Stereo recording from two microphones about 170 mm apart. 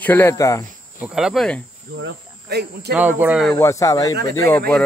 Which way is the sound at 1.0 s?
5° right (ahead or behind).